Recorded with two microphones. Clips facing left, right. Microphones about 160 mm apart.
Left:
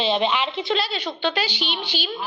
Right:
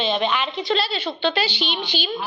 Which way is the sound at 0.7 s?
15° left (ahead or behind).